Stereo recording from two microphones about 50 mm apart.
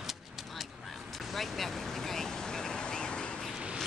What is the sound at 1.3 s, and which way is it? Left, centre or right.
Vehicle, centre.